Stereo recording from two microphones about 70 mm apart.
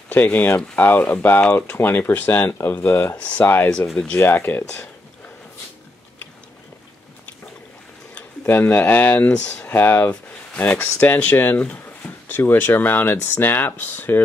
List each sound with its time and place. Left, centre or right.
0.1 s speech: left
3.2 s speech: left
8.5 s speech: left
9.3 s speech: centre
9.7 s speech: left
10.5 s speech: left
11.5 s speech: centre
12.3 s speech: left